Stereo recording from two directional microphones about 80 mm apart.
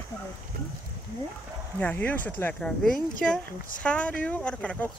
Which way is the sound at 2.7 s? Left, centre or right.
Centre.